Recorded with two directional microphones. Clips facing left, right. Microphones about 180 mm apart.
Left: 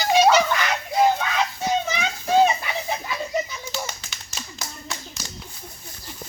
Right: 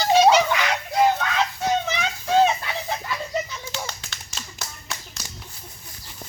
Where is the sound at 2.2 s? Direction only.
10° left (ahead or behind).